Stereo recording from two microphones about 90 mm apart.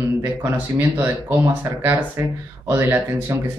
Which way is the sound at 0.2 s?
25° right (ahead or behind).